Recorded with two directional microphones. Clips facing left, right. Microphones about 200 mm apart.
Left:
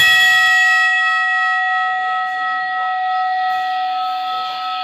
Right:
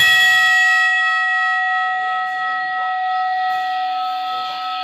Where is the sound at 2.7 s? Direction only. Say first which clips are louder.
Left 1 dB; 75° left (ahead or behind).